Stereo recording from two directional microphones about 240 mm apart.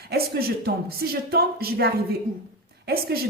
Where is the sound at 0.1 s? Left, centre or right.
Right.